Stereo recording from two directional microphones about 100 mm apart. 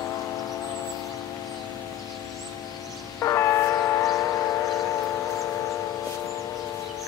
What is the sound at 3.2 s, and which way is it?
Train, 25° left (ahead or behind).